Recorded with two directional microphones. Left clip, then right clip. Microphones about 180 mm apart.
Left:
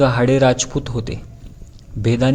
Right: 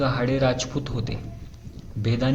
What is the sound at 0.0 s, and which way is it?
A man's voice, 30° left (ahead or behind).